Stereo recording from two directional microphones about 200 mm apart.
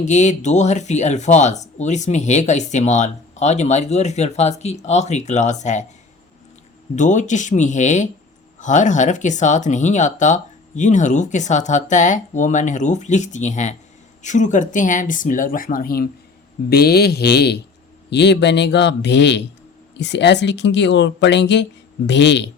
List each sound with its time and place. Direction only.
0.0 s speech: 35° left (ahead or behind)
6.9 s speech: 40° left (ahead or behind); by 22.4 s 60° left (ahead or behind)